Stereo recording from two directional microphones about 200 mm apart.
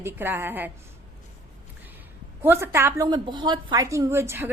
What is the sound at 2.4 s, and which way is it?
A woman's voice, 10° right (ahead or behind).